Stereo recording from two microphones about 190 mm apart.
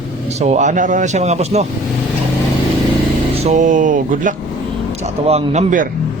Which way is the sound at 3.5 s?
40° right (ahead or behind).